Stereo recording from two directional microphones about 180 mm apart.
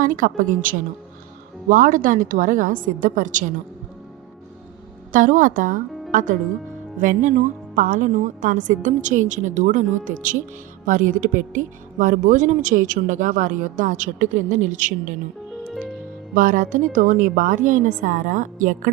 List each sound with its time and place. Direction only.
0.0 s speech: 50° right (ahead or behind)
5.1 s speech: 45° right (ahead or behind)
16.3 s speech: 50° right (ahead or behind)